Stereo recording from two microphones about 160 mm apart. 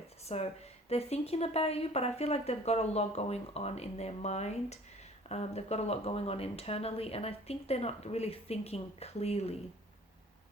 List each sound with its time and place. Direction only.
0.3 s a woman's voice: 40° left (ahead or behind)